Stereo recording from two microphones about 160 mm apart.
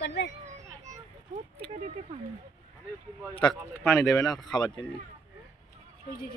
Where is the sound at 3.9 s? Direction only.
20° left (ahead or behind).